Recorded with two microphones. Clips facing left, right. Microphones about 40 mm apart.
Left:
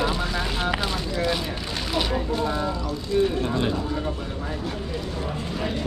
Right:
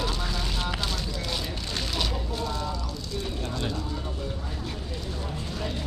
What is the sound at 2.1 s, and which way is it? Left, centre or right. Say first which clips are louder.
Speech: left 7 dB; left.